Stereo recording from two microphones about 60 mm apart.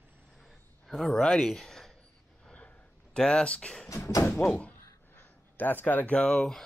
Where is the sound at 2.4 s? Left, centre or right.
Centre.